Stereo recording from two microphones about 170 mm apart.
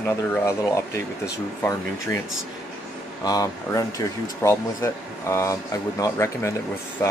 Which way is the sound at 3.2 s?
20° left (ahead or behind).